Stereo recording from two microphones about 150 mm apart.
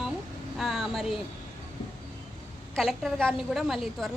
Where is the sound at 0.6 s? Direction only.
Centre (ahead or behind).